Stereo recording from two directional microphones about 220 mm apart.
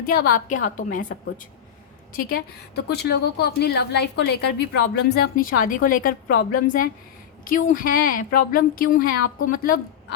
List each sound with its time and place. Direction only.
0.0 s a woman's voice: 45° left (ahead or behind)
2.1 s a woman's voice: 45° left (ahead or behind)